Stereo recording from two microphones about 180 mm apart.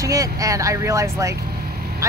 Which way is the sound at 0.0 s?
20° right (ahead or behind).